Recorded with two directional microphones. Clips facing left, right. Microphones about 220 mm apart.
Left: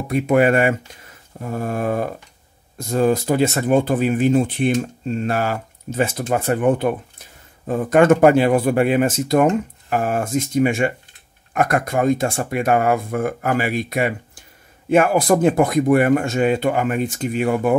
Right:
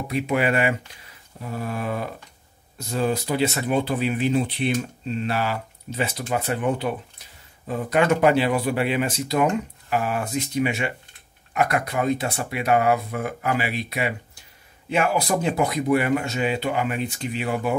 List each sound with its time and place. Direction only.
0.1 s speech: 45° left (ahead or behind)